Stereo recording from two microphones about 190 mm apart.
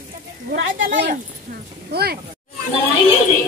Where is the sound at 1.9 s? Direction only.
55° right (ahead or behind).